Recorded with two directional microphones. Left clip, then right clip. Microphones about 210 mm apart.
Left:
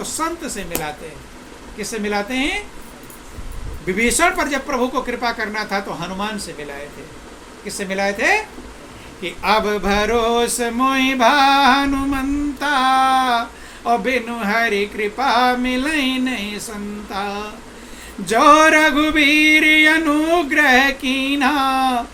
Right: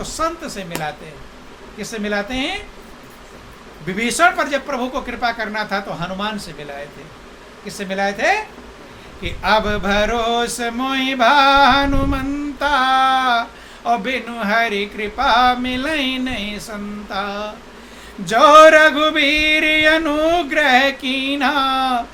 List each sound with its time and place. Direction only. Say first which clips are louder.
0.0 s male singing: right 1 dB; 15° right (ahead or behind)
1.8 s male singing: even; 15° right (ahead or behind)
3.9 s male singing: right 1 dB; 15° right (ahead or behind)
7.6 s male singing: even; 15° right (ahead or behind)